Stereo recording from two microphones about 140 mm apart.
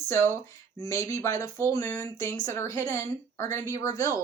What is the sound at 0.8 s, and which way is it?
A woman's voice, 20° left (ahead or behind).